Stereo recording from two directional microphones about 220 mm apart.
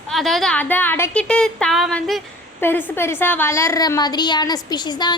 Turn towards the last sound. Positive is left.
turn(degrees=20)  # may be behind; listen again after turning